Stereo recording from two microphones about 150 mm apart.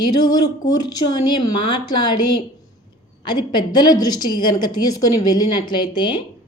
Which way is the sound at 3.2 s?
30° left (ahead or behind).